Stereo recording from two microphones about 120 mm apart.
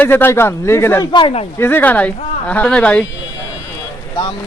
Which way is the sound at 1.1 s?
50° left (ahead or behind).